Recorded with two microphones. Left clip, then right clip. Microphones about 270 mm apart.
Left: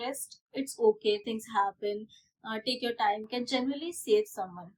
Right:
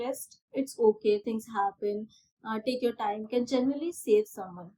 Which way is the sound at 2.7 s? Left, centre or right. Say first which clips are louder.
Left 1 dB; left.